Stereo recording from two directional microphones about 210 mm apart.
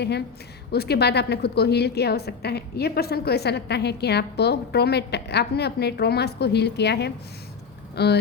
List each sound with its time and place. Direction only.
0.0 s a woman's voice: 50° left (ahead or behind)